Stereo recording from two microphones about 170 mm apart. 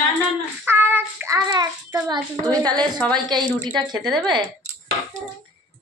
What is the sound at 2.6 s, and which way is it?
Speech, 25° right (ahead or behind).